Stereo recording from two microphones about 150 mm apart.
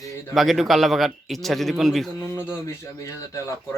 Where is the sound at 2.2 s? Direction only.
15° left (ahead or behind).